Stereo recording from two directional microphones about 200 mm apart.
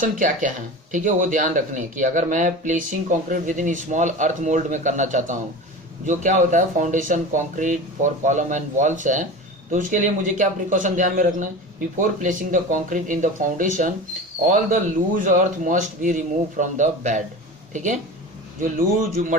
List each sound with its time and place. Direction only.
0.0 s speech: 40° right (ahead or behind)
18.6 s speech: 45° right (ahead or behind)